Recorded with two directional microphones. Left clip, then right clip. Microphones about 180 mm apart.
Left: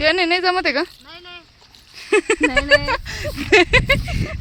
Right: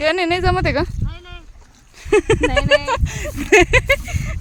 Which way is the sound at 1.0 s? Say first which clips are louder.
Even; 60° right (ahead or behind).